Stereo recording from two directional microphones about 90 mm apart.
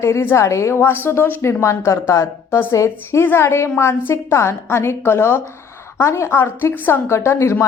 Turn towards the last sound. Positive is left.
turn(degrees=30)  # may be behind; listen again after turning